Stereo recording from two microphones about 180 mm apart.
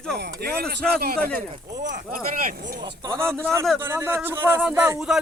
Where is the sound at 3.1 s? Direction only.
5° left (ahead or behind).